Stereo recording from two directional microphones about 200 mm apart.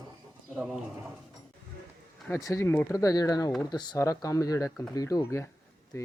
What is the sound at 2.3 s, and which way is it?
Speech, 15° left (ahead or behind).